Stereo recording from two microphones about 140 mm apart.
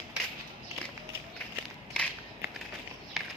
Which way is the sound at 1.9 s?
5° left (ahead or behind).